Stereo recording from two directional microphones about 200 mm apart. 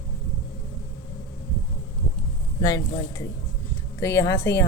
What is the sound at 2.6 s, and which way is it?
Speech, 20° left (ahead or behind).